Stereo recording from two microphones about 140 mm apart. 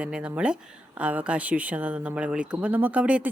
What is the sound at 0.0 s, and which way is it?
A woman's voice, 10° right (ahead or behind).